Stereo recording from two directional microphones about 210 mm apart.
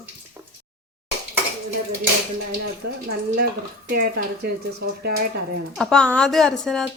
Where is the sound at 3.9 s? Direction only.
50° right (ahead or behind).